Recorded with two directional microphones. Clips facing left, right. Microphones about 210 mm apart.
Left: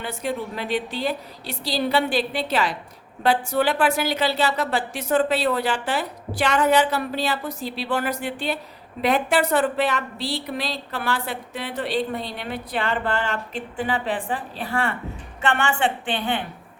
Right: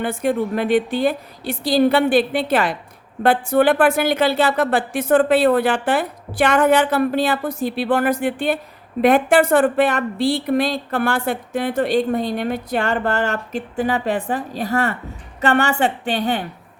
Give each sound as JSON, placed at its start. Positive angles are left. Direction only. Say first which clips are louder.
{"t": 0.0, "sound": "a woman's voice", "louder": "right 8 dB", "side_deg": -50}